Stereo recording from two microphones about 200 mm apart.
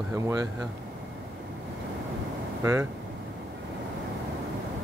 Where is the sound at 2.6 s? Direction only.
15° right (ahead or behind).